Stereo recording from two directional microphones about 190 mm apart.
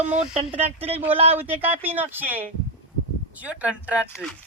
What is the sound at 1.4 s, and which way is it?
Speech, 10° right (ahead or behind).